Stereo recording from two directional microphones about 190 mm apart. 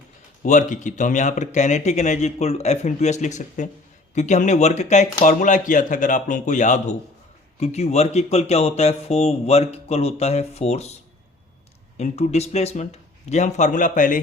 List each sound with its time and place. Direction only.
0.4 s speech: 40° left (ahead or behind)
11.9 s speech: 35° left (ahead or behind)